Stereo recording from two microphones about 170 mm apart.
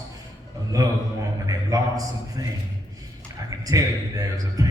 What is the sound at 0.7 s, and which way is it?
Speech, 20° right (ahead or behind).